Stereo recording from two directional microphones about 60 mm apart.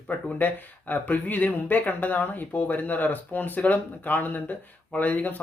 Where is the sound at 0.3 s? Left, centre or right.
Left.